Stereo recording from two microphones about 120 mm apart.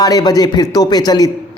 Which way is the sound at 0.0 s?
30° left (ahead or behind).